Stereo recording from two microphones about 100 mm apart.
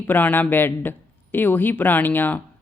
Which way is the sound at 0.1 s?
20° left (ahead or behind).